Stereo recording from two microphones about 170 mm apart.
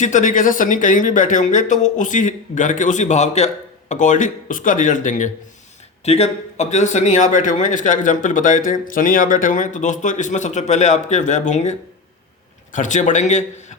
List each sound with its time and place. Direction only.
0.0 s a man's voice: 50° left (ahead or behind)